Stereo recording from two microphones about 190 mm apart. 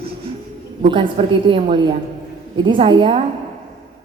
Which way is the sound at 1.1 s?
30° right (ahead or behind).